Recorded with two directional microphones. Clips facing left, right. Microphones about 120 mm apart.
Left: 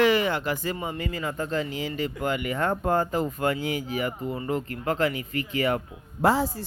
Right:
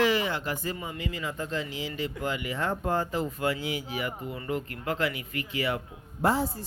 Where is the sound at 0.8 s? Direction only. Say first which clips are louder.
Left 4 dB; 50° left (ahead or behind).